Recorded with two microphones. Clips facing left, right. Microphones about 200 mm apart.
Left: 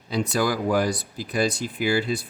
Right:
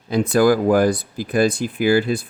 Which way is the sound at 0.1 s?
55° right (ahead or behind).